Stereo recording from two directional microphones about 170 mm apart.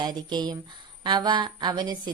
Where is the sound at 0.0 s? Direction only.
25° right (ahead or behind).